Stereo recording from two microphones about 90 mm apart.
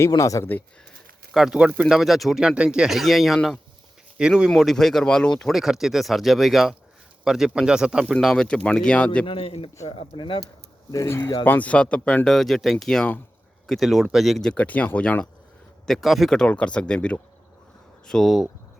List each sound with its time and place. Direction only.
0.1 s speech: 40° left (ahead or behind)
1.3 s speech: 5° right (ahead or behind)
4.2 s speech: 10° right (ahead or behind)
4.5 s speech: centre (ahead or behind)
5.5 s speech: 5° right (ahead or behind)
8.0 s speech: 5° left (ahead or behind)
9.2 s a man's voice: 75° left (ahead or behind)
10.2 s speech: 65° left (ahead or behind)
10.9 s speech: 30° left (ahead or behind)
11.4 s speech: 20° left (ahead or behind); by 14.5 s centre (ahead or behind)
14.5 s speech: 15° left (ahead or behind)
15.9 s speech: centre (ahead or behind)